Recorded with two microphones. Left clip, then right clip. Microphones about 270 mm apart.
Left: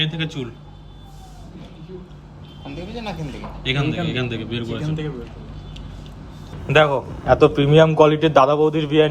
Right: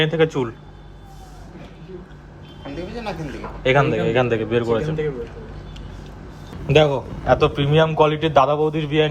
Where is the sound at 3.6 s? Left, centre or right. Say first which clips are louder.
Right 7 dB; centre.